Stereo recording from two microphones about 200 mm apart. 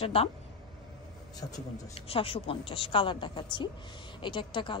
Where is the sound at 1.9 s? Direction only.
30° left (ahead or behind).